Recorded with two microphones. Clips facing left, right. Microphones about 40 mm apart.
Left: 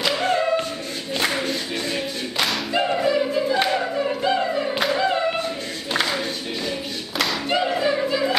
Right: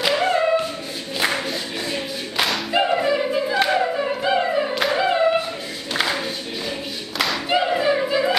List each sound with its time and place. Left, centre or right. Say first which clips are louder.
0.1 s singing: right 3 dB; right
1.5 s clapping: left 1 dB; centre
2.7 s music: right 1 dB; centre
4.9 s singing: right 2 dB; centre
7.2 s music: right 2 dB; centre